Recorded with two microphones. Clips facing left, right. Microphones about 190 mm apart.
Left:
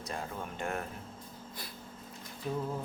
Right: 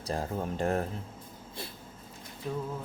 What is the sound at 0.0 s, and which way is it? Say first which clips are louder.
Speech: right 6 dB; 35° right (ahead or behind).